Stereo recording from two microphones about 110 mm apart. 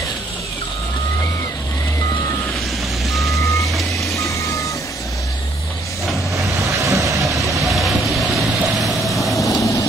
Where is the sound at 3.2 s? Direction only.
30° left (ahead or behind).